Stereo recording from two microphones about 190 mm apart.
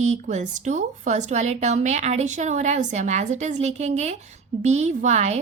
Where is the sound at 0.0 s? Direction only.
40° right (ahead or behind).